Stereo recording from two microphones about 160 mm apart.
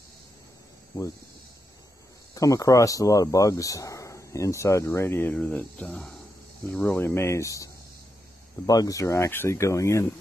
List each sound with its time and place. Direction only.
0.9 s speech: 20° left (ahead or behind)
2.3 s speech: 20° left (ahead or behind)